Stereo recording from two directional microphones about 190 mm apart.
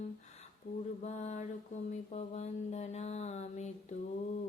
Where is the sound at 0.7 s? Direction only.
30° left (ahead or behind).